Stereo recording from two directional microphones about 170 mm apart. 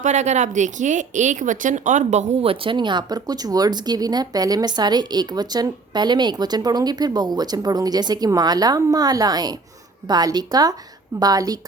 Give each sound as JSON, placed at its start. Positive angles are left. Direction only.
{"t": 0.0, "sound": "speech", "side_deg": -45}